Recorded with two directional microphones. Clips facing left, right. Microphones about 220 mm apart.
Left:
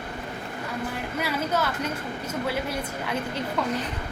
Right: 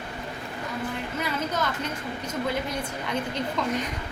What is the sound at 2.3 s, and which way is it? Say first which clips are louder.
A woman's voice: even; 10° left (ahead or behind).